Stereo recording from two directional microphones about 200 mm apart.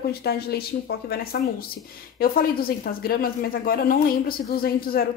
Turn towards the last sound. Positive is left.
turn(degrees=50)  # may be behind; listen again after turning